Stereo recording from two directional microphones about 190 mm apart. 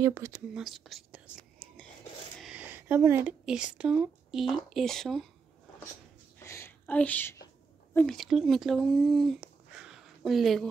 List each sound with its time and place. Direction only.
0.0 s speech: 15° right (ahead or behind)
0.6 s whispering: centre (ahead or behind)
2.4 s speech: 5° right (ahead or behind)
6.4 s a sound: 15° left (ahead or behind)
7.9 s speech: 5° left (ahead or behind)